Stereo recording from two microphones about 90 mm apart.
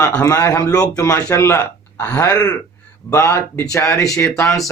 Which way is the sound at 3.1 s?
30° left (ahead or behind).